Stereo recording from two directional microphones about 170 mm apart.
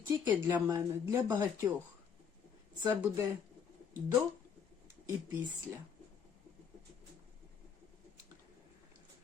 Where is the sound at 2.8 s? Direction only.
15° right (ahead or behind).